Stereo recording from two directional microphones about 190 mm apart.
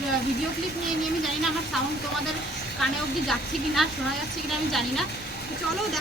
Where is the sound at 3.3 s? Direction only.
Centre (ahead or behind).